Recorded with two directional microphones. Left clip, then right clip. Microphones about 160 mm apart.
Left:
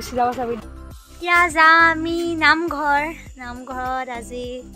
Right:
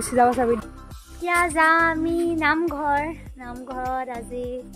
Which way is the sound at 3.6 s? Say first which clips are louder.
Left 2 dB; 15° left (ahead or behind).